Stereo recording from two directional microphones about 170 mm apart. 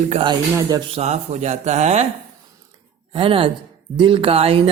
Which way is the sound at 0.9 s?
40° right (ahead or behind).